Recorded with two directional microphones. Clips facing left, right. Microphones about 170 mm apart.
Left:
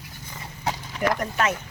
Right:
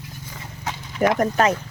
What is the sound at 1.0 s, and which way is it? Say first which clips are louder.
Speech: right 7 dB; 45° right (ahead or behind).